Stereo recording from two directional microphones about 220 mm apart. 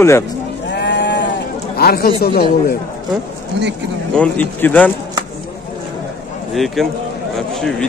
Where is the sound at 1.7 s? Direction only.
45° left (ahead or behind).